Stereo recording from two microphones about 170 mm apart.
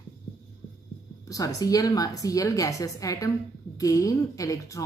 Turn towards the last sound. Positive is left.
turn(degrees=20)  # may be behind; listen again after turning